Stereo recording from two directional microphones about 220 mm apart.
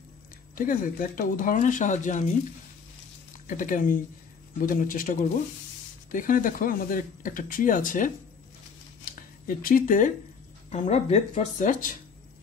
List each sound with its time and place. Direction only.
0.6 s speech: 40° left (ahead or behind)
3.4 s speech: 40° left (ahead or behind)
9.0 s a sound: 40° left (ahead or behind)
10.7 s speech: 30° left (ahead or behind)